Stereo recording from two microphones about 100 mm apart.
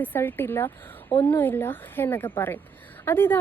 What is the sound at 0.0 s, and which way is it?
A woman's voice, 20° left (ahead or behind).